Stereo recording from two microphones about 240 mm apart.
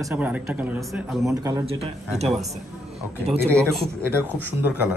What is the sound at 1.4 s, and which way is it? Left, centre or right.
Speech, right.